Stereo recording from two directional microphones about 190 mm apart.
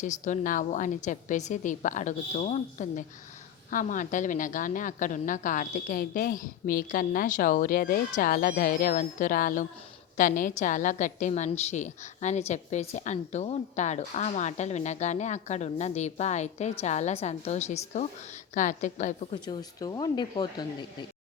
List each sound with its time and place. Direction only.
0.0 s a woman's voice: 40° left (ahead or behind)
19.3 s speech: 20° left (ahead or behind)